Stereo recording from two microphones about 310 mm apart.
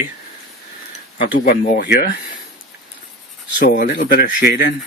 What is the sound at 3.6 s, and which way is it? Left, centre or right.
Speech, left.